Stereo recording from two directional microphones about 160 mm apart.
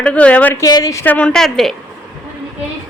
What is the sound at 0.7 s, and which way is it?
Speech, 25° left (ahead or behind).